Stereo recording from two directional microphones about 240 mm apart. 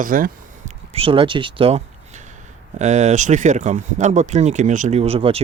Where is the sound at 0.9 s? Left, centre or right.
Right.